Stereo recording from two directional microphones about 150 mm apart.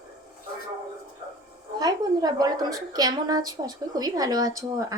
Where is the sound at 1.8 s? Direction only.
25° right (ahead or behind).